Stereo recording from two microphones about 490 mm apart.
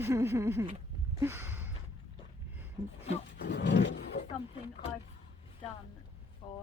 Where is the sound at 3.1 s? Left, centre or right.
Centre.